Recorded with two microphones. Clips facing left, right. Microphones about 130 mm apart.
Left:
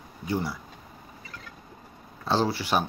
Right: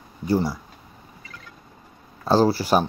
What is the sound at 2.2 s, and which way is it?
Speech, 40° right (ahead or behind).